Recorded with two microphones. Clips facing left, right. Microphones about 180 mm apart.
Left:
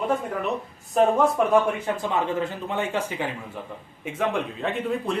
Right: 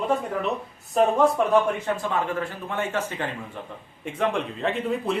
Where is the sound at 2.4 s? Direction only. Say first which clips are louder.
Left 2 dB; 15° left (ahead or behind).